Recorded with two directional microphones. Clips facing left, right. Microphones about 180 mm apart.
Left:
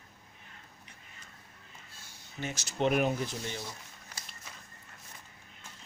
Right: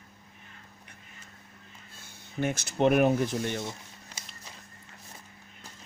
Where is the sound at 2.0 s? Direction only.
55° right (ahead or behind).